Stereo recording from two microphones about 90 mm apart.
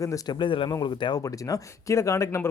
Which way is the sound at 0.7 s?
45° left (ahead or behind).